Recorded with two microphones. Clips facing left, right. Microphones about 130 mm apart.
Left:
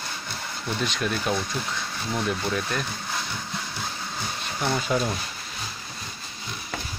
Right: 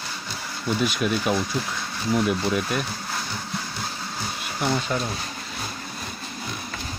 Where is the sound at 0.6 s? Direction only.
5° right (ahead or behind).